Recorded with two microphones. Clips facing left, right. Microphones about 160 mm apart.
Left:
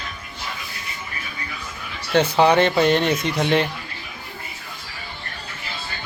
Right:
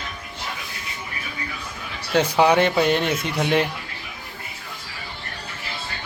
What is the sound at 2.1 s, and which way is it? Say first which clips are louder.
Speech: left 1 dB; 10° right (ahead or behind).